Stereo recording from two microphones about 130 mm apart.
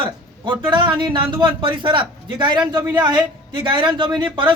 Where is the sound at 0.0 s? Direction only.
40° right (ahead or behind).